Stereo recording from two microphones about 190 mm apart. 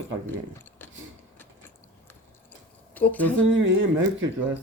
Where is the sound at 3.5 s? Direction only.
80° right.